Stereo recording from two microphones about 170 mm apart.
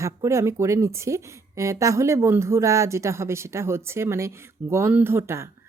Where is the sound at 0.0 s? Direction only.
15° right (ahead or behind).